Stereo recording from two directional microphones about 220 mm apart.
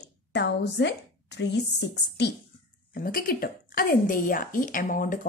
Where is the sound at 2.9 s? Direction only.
40° left (ahead or behind).